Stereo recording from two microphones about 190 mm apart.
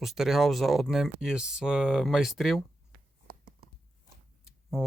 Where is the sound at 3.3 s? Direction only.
50° right (ahead or behind).